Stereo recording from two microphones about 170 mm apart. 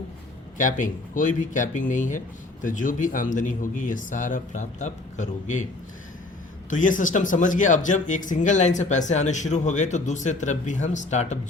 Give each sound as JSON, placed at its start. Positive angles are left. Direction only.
{"t": 0.5, "sound": "speech", "side_deg": 50}
{"t": 6.7, "sound": "speech", "side_deg": 50}